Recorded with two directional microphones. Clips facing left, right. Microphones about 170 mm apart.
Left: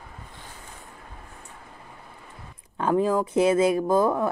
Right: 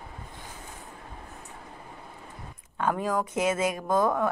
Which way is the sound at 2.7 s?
25° left (ahead or behind).